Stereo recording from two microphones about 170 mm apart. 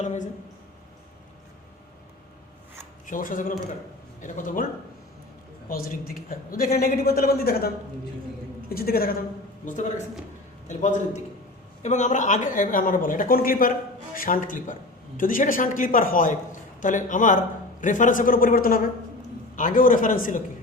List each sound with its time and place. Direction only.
0.0 s speech: 45° left (ahead or behind)
3.1 s speech: 55° left (ahead or behind)
5.6 s a woman's voice: 55° left (ahead or behind)
8.7 s a woman's voice: 60° left (ahead or behind)
9.6 s speech: 50° left (ahead or behind)